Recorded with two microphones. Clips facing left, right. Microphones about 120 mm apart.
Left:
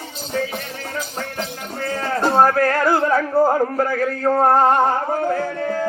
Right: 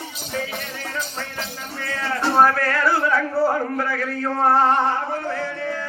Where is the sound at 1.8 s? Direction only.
40° left (ahead or behind).